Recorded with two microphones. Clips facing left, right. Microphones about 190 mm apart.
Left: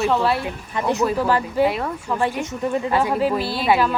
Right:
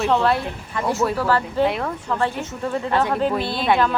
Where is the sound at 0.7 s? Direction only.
20° left (ahead or behind).